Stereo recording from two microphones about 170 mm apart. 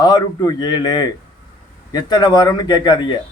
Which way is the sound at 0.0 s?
25° left (ahead or behind).